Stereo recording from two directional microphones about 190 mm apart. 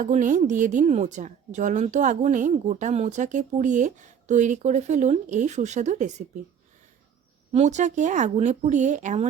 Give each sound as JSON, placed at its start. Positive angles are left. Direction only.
{"t": 0.0, "sound": "speech", "side_deg": -40}
{"t": 7.5, "sound": "speech", "side_deg": -35}